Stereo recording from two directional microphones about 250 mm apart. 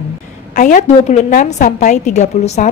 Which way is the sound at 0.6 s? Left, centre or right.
Left.